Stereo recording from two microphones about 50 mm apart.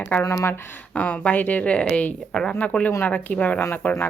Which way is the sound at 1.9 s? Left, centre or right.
Left.